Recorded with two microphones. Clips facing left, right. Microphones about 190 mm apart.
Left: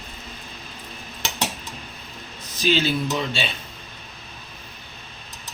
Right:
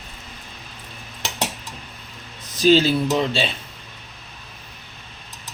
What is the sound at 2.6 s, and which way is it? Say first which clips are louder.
Speech: right 6 dB; 40° right (ahead or behind).